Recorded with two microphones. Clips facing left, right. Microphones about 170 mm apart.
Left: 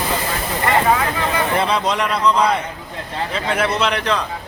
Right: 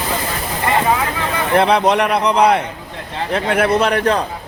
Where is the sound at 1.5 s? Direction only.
60° right (ahead or behind).